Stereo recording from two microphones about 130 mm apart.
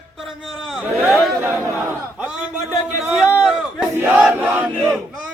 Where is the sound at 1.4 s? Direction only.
15° right (ahead or behind).